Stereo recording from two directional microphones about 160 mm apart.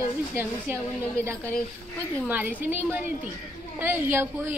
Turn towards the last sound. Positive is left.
turn(degrees=-15)  # may be behind; listen again after turning